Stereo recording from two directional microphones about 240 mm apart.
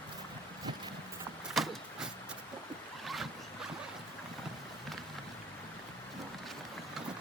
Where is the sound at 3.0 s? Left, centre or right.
Centre.